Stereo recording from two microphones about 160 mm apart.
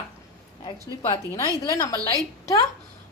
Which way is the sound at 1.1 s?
20° left (ahead or behind).